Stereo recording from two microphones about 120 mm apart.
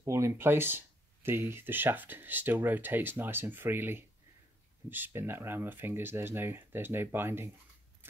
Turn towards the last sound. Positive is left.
turn(degrees=-20)  # may be behind; listen again after turning